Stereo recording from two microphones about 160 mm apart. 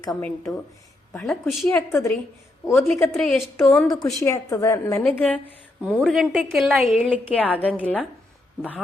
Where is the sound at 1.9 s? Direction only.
15° left (ahead or behind).